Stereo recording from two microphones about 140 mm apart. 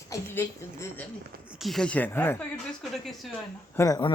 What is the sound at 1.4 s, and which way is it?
Speech, 5° right (ahead or behind).